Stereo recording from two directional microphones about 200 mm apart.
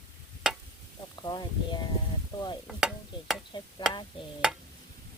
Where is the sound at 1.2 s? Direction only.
20° left (ahead or behind).